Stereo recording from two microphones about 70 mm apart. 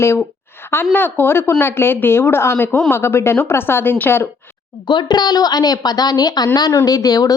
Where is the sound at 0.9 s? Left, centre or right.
Left.